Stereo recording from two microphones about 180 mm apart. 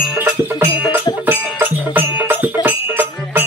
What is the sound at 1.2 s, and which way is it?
Music, 10° right (ahead or behind).